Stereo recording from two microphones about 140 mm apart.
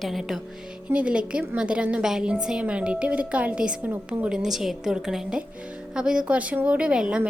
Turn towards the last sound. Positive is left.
turn(degrees=-5)  # may be behind; listen again after turning